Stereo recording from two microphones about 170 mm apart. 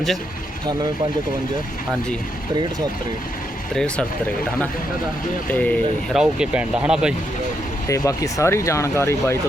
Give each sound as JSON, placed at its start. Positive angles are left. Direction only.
{"t": 3.8, "sound": "speech", "side_deg": 5}
{"t": 5.5, "sound": "speech", "side_deg": 10}
{"t": 6.1, "sound": "speech", "side_deg": -5}
{"t": 7.9, "sound": "speech", "side_deg": 20}